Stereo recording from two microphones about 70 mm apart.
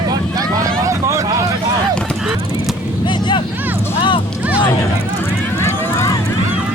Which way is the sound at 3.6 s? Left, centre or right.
Right.